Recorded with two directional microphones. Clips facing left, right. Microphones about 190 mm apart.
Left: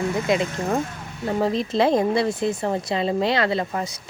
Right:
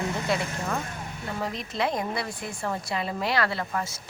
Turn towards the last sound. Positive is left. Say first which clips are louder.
# left 6 dB
turn(degrees=20)  # may be behind; listen again after turning